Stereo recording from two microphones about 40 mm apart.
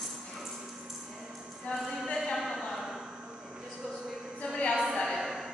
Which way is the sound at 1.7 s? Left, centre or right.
Left.